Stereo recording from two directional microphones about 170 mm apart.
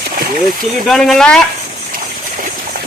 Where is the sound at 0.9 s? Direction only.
5° left (ahead or behind).